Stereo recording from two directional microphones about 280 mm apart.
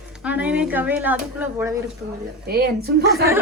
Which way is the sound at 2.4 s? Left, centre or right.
Right.